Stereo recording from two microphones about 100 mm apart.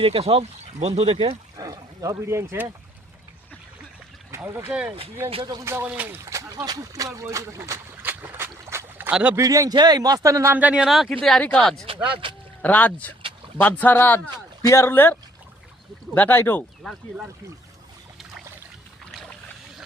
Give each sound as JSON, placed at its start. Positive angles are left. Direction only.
{"t": 0.0, "sound": "speech", "side_deg": -80}
{"t": 1.5, "sound": "speech", "side_deg": -35}
{"t": 4.4, "sound": "speech", "side_deg": -25}
{"t": 4.7, "sound": "speech", "side_deg": -10}
{"t": 5.6, "sound": "speech", "side_deg": -20}
{"t": 6.7, "sound": "a sound", "side_deg": -35}
{"t": 9.0, "sound": "speech", "side_deg": -15}
{"t": 9.3, "sound": "a man's voice", "side_deg": -35}
{"t": 10.5, "sound": "speech", "side_deg": -15}
{"t": 10.8, "sound": "speech", "side_deg": 0}
{"t": 11.2, "sound": "speech", "side_deg": 10}
{"t": 12.2, "sound": "a sound", "side_deg": -60}
{"t": 12.6, "sound": "speech", "side_deg": 15}
{"t": 16.8, "sound": "speech", "side_deg": 5}